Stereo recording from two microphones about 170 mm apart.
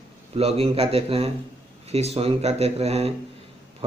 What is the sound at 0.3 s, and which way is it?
Speech, 35° right (ahead or behind).